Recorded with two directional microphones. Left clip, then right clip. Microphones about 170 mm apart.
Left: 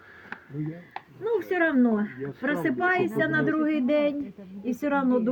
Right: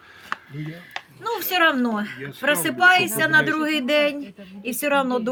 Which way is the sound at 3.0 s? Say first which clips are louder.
Right 6 dB; 25° right (ahead or behind).